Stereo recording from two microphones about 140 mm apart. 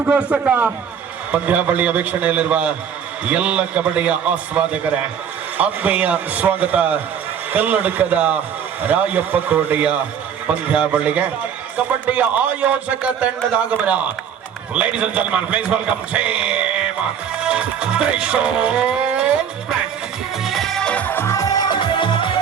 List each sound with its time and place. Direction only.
0.0 s a man's voice: 10° right (ahead or behind)
17.4 s music: 5° right (ahead or behind)
20.4 s music: centre (ahead or behind); by 22.3 s 35° left (ahead or behind)